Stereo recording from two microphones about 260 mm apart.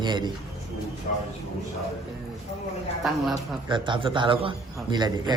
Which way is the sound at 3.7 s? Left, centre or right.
Centre.